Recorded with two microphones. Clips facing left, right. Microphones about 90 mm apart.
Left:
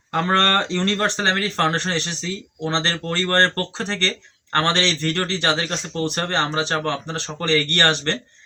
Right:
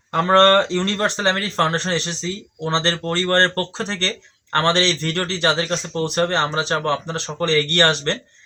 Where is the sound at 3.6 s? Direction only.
20° right (ahead or behind).